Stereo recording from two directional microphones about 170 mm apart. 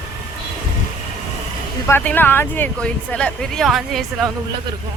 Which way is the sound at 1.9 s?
10° left (ahead or behind).